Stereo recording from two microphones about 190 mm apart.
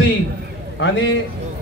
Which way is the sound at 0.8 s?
70° left (ahead or behind).